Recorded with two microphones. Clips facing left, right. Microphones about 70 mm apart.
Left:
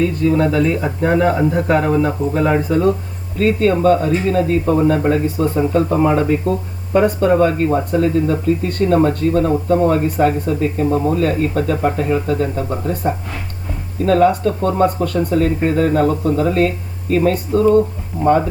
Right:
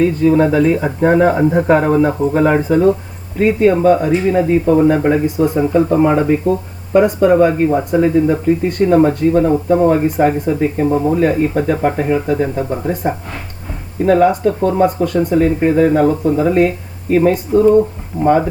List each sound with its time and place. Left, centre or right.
0.0 s speech: right
10.8 s speech: centre